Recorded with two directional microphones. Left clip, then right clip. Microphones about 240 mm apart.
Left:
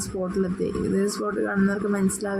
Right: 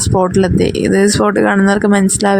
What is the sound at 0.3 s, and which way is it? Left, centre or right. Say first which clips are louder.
Speech: right 13 dB; right.